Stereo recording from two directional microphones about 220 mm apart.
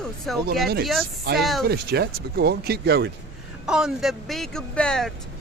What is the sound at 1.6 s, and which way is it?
Speech, 45° right (ahead or behind).